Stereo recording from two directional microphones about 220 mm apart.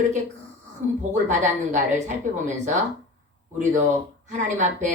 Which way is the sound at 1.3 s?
35° right (ahead or behind).